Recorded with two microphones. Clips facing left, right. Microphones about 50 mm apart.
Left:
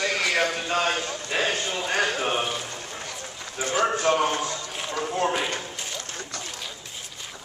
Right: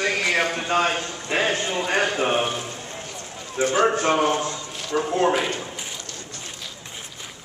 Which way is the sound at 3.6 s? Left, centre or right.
Right.